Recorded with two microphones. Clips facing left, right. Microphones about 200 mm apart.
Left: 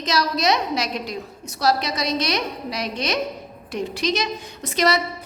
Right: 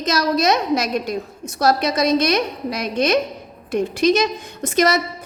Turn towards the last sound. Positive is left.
turn(degrees=-50)  # may be behind; listen again after turning